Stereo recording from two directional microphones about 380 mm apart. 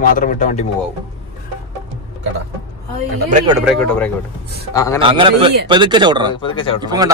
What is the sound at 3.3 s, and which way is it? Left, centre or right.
Speech, centre.